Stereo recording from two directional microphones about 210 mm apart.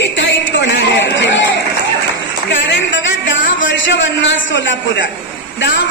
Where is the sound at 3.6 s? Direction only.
60° left (ahead or behind).